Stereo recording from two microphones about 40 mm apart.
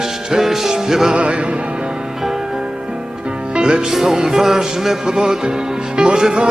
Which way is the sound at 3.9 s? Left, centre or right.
Centre.